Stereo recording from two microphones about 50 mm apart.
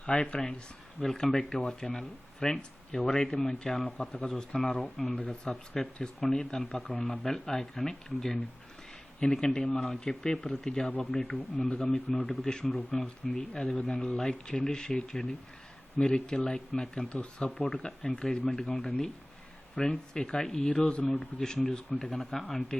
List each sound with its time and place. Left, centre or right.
0.0 s speech: left
0.9 s speech: centre
5.5 s speech: centre